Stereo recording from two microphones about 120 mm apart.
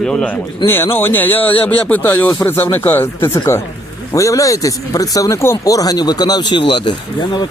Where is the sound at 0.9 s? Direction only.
15° left (ahead or behind).